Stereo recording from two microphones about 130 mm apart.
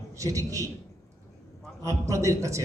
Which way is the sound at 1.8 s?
25° right (ahead or behind).